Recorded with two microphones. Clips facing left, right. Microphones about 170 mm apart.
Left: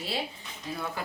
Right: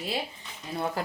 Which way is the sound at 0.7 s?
35° right (ahead or behind).